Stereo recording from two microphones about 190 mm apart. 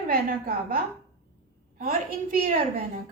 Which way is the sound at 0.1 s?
50° right (ahead or behind).